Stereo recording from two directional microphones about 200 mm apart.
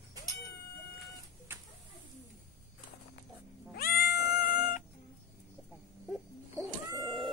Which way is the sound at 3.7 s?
50° left (ahead or behind).